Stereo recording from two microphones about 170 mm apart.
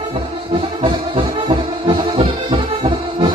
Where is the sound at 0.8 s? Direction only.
30° right (ahead or behind).